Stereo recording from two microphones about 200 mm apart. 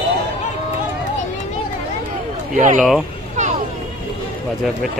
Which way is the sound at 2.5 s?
40° right (ahead or behind).